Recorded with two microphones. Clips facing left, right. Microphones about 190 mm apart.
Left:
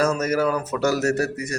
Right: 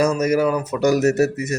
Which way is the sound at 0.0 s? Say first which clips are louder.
Right 3 dB; 10° right (ahead or behind).